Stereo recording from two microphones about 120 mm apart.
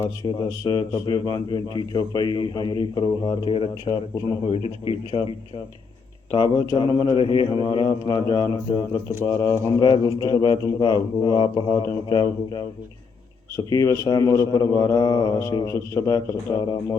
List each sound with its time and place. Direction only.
0.3 s a man's voice: 35° left (ahead or behind)
3.5 s a man's voice: 45° left (ahead or behind)
6.3 s a man's voice: 40° left (ahead or behind)
9.2 s speech: 20° left (ahead or behind)
9.8 s a man's voice: 35° left (ahead or behind)
11.8 s speech: 25° left (ahead or behind)
13.7 s a man's voice: 25° left (ahead or behind)